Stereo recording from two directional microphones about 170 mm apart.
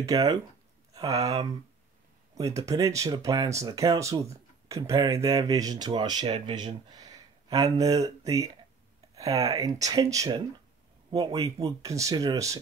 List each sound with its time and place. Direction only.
0.0 s speech: 20° right (ahead or behind)